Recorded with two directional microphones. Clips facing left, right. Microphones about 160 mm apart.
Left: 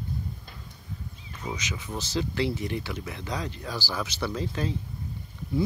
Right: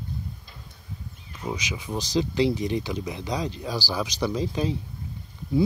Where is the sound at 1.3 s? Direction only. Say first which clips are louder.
Right 3 dB; 10° right (ahead or behind).